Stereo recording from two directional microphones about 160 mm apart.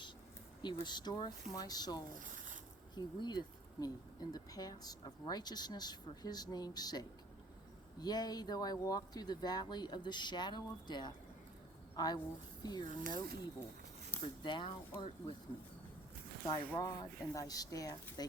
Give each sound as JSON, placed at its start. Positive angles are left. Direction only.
{"t": 0.6, "sound": "speech", "side_deg": 30}
{"t": 2.1, "sound": "a sound", "side_deg": -55}
{"t": 2.9, "sound": "speech", "side_deg": 25}
{"t": 8.0, "sound": "speech", "side_deg": 25}
{"t": 16.5, "sound": "speech", "side_deg": 25}